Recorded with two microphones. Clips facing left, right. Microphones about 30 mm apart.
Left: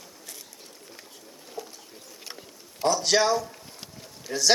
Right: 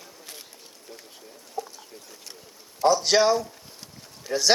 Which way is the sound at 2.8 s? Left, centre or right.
Centre.